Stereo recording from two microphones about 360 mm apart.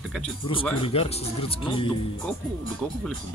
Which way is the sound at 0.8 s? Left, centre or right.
Centre.